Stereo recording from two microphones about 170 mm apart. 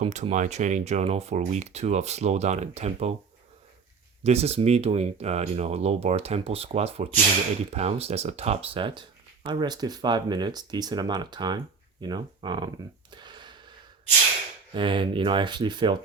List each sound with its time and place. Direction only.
0.0 s speech: 45° right (ahead or behind)
4.2 s speech: 40° right (ahead or behind)
14.7 s speech: 30° right (ahead or behind)